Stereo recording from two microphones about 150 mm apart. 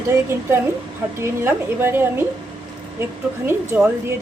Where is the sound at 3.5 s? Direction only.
15° right (ahead or behind).